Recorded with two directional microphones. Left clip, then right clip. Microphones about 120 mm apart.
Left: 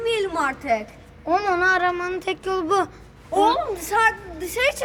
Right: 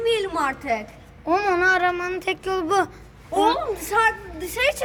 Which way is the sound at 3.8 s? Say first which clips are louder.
Left 1 dB; 25° left (ahead or behind).